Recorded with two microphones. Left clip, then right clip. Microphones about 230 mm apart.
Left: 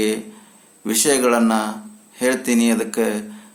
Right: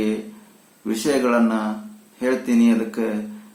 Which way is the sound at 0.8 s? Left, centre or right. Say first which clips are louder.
Left 3 dB; left.